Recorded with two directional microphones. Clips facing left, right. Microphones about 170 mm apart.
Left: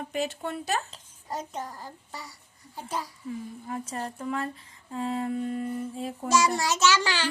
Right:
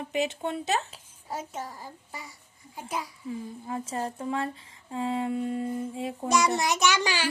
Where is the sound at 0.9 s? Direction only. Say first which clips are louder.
Left 1 dB; 10° right (ahead or behind).